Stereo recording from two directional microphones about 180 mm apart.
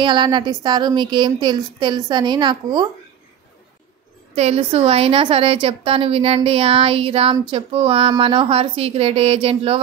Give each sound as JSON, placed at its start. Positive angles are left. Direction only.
{"t": 0.0, "sound": "a woman's voice", "side_deg": -25}
{"t": 4.4, "sound": "a woman's voice", "side_deg": -35}